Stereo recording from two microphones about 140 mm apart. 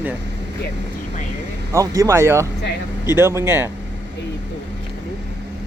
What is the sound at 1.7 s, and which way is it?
Speech, 20° right (ahead or behind).